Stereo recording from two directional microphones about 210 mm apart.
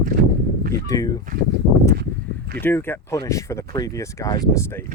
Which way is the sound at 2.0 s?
50° right (ahead or behind).